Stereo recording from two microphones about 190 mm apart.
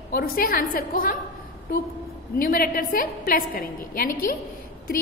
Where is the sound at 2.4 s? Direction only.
50° left (ahead or behind).